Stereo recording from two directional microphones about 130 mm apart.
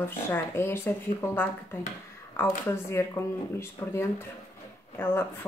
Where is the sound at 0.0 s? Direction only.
20° left (ahead or behind).